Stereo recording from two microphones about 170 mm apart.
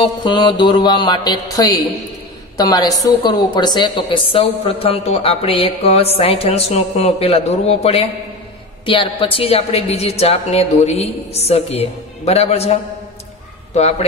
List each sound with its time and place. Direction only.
0.0 s mantra: 25° left (ahead or behind)
2.5 s a woman's voice: 20° left (ahead or behind); by 12.7 s 40° left (ahead or behind)
13.7 s a woman's voice: 40° left (ahead or behind)